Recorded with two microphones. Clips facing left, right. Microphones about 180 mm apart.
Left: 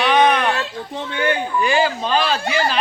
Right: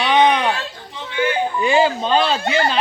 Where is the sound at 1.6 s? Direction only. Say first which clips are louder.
Right 3 dB; 25° right (ahead or behind).